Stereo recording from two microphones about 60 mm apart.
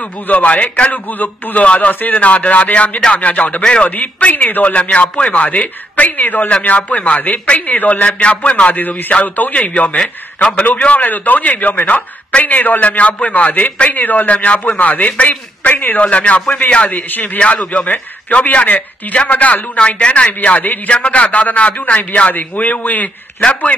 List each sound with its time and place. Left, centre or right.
0.3 s a man's voice: left